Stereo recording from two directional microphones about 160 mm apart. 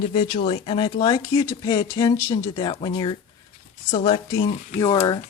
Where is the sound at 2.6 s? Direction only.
30° left (ahead or behind).